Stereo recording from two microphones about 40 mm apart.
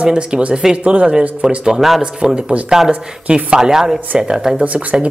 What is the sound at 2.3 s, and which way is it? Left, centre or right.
Speech, right.